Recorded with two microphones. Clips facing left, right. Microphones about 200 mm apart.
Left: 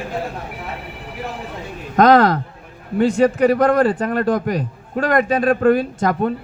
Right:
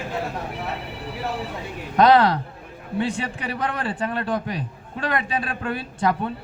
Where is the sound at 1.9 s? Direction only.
45° left (ahead or behind).